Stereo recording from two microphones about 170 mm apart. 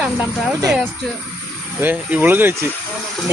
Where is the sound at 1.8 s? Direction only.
10° right (ahead or behind).